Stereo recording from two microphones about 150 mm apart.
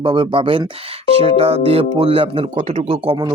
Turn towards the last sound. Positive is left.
turn(degrees=-40)  # may be behind; listen again after turning